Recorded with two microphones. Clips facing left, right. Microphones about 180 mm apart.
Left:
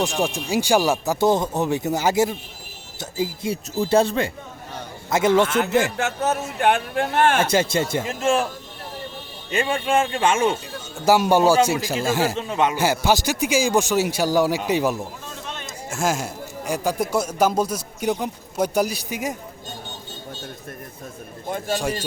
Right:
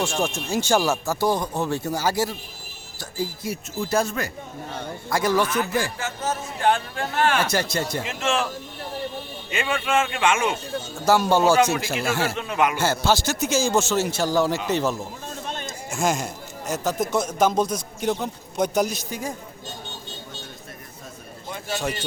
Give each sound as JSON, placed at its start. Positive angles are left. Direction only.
{"t": 0.0, "sound": "a man's voice", "side_deg": 15}
{"t": 6.0, "sound": "speech", "side_deg": 70}
{"t": 7.5, "sound": "speech", "side_deg": 20}
{"t": 8.0, "sound": "a man's voice", "side_deg": 35}
{"t": 9.5, "sound": "a man's voice", "side_deg": 35}
{"t": 11.0, "sound": "speech", "side_deg": 10}
{"t": 12.2, "sound": "speech", "side_deg": 35}
{"t": 12.7, "sound": "speech", "side_deg": 15}
{"t": 21.4, "sound": "a sound", "side_deg": 50}
{"t": 21.8, "sound": "speech", "side_deg": 10}